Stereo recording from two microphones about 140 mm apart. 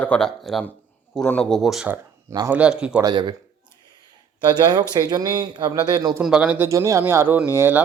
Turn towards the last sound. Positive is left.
turn(degrees=-15)  # may be behind; listen again after turning